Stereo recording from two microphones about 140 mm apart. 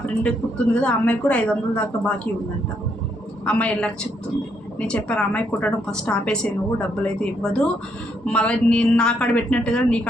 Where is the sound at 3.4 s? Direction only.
5° left (ahead or behind).